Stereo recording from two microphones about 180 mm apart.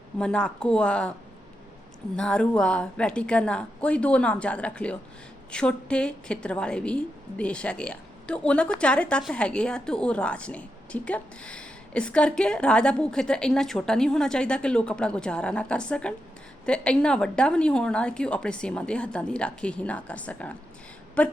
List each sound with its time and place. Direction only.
0.2 s a woman's voice: 5° left (ahead or behind)
2.1 s a woman's voice: 5° left (ahead or behind)